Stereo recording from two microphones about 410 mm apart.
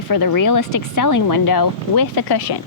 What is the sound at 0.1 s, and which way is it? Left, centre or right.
A woman's voice, left.